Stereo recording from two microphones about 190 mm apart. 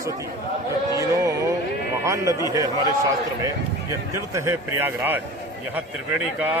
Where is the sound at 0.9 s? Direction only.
15° right (ahead or behind).